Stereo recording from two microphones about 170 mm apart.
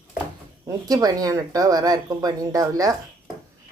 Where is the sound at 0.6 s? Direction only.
20° right (ahead or behind).